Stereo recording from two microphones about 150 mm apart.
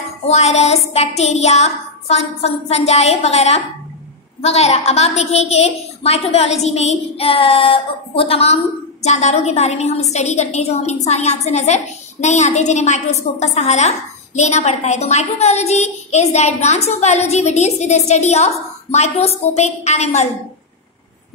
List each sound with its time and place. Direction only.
0.3 s a woman's voice: 45° left (ahead or behind)